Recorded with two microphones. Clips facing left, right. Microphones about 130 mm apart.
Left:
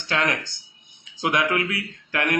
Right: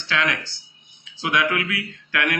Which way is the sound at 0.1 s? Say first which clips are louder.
Even; 40° left (ahead or behind).